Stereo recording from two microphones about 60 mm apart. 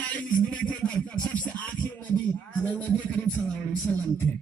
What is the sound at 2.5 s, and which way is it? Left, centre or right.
A man's voice, left.